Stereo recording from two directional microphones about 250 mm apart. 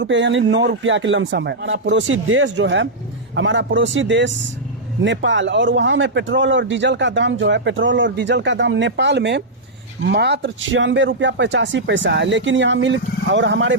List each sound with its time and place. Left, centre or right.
0.0 s a man's voice: right